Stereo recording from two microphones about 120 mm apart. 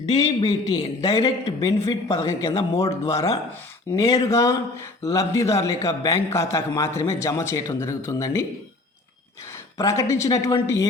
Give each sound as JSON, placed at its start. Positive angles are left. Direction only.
{"t": 0.2, "sound": "a man's voice", "side_deg": 35}
{"t": 9.7, "sound": "a man's voice", "side_deg": 25}